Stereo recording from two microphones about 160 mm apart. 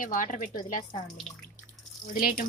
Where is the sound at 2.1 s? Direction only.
55° left (ahead or behind).